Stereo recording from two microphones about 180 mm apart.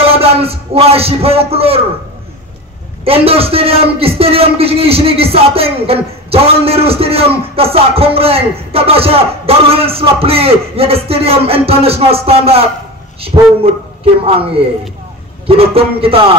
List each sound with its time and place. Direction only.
0.0 s a man's voice: 35° right (ahead or behind)
3.1 s a man's voice: 30° right (ahead or behind)